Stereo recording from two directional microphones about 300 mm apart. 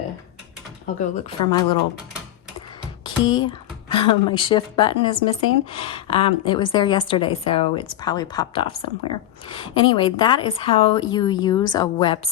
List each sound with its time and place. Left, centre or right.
0.9 s a woman's voice: centre
3.0 s a woman's voice: centre